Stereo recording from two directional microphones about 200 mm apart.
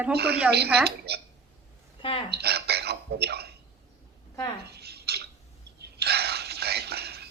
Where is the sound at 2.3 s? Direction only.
55° right (ahead or behind).